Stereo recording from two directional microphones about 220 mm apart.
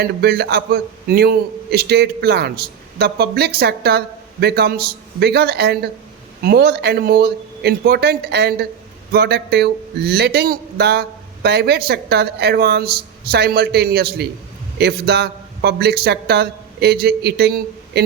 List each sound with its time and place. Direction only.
0.0 s a man's voice: 45° right (ahead or behind)